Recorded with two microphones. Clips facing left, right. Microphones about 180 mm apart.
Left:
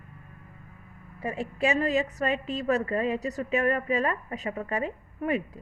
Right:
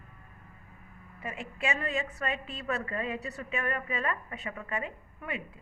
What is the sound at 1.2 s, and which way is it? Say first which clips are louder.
A woman's voice: left 7 dB; 35° left (ahead or behind).